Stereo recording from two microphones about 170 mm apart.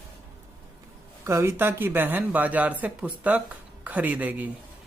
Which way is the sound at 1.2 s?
15° right (ahead or behind).